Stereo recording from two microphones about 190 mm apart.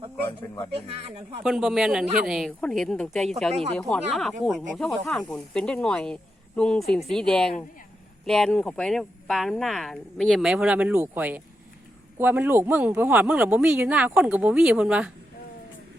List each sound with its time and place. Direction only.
1.5 s speech: centre (ahead or behind)
3.5 s speech: 35° right (ahead or behind)
3.8 s speech: 5° left (ahead or behind)